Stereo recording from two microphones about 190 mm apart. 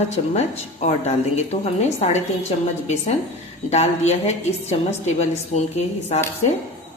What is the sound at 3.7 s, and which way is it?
Speech, 35° left (ahead or behind).